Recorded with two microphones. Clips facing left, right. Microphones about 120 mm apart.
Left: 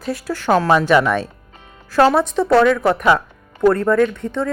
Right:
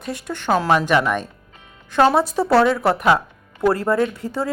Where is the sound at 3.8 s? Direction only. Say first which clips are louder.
Left 4 dB; 30° right (ahead or behind).